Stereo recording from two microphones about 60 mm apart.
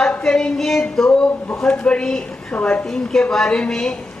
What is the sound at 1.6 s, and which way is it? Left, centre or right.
Speech, centre.